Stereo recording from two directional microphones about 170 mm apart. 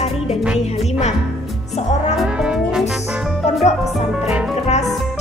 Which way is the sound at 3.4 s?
40° left (ahead or behind).